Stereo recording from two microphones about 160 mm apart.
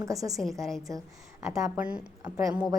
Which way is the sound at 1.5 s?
20° right (ahead or behind).